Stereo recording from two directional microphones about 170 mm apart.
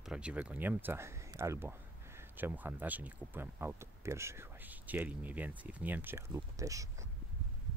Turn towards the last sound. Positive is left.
turn(degrees=-20)  # may be behind; listen again after turning